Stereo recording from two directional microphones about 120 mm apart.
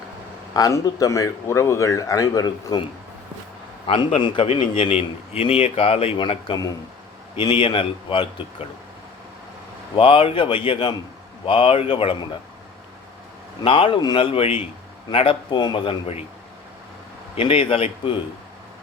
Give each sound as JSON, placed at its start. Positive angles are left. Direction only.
{"t": 0.5, "sound": "a man's voice", "side_deg": 30}
{"t": 3.8, "sound": "a man's voice", "side_deg": 50}
{"t": 9.9, "sound": "a man's voice", "side_deg": 50}
{"t": 13.6, "sound": "a man's voice", "side_deg": 45}
{"t": 17.3, "sound": "a man's voice", "side_deg": 50}